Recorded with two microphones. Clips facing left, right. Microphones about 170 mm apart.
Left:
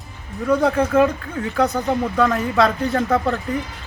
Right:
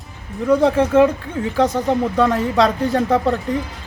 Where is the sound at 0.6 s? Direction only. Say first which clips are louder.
Right 3 dB; 25° right (ahead or behind).